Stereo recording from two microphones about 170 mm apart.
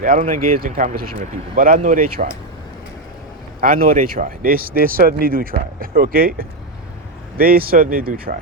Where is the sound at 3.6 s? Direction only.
55° right (ahead or behind).